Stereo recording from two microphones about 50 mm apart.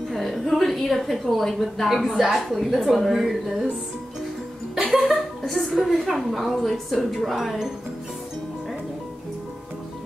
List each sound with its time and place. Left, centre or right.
0.1 s a woman's voice: centre
5.1 s a woman's voice: centre